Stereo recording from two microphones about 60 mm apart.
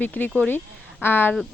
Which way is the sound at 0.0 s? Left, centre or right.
Left.